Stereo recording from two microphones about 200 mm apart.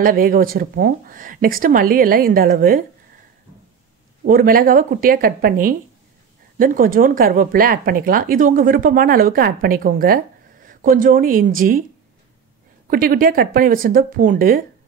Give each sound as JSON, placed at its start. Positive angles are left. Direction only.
{"t": 0.0, "sound": "speech", "side_deg": -45}
{"t": 4.2, "sound": "speech", "side_deg": -45}
{"t": 12.9, "sound": "speech", "side_deg": -45}